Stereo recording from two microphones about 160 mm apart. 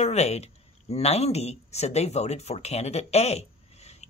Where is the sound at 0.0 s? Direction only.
45° left (ahead or behind).